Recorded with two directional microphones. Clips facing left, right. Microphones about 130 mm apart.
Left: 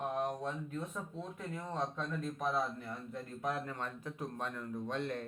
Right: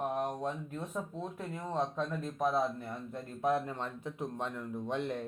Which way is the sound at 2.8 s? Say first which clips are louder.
Right 2 dB; 30° right (ahead or behind).